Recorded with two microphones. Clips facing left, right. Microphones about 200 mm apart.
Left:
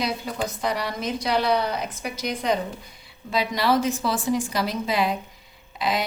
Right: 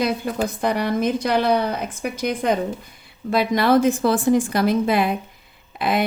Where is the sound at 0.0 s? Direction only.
55° right (ahead or behind).